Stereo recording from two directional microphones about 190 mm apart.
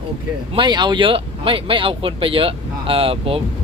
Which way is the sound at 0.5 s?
25° right (ahead or behind).